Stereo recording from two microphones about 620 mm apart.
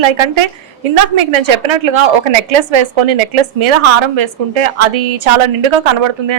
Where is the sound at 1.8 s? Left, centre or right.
Right.